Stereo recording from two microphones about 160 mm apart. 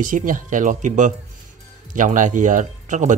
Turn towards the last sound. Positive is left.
turn(degrees=-50)  # may be behind; listen again after turning